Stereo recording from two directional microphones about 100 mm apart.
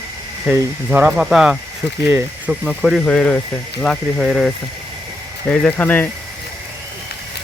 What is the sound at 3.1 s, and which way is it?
Speech, 10° left (ahead or behind).